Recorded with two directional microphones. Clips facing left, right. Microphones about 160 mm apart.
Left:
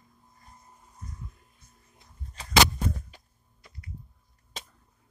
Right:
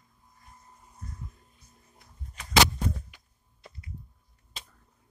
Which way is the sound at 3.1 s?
35° left (ahead or behind).